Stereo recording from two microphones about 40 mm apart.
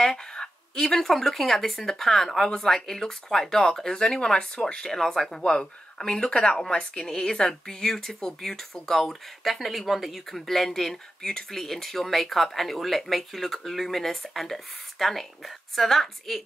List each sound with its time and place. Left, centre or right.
0.0 s speech: centre